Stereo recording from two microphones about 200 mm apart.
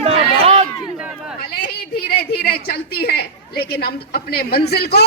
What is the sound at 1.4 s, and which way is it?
A woman's voice, 45° left (ahead or behind).